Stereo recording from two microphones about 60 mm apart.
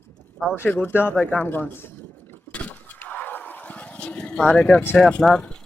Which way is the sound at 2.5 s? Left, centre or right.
Left.